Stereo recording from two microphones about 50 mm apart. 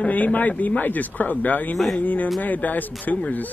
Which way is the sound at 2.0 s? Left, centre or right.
Left.